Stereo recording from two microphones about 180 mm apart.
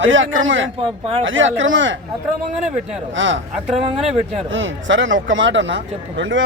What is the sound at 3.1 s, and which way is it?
Speech, 90° right.